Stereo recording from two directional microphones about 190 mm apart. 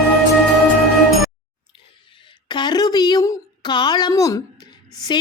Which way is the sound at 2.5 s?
25° left (ahead or behind).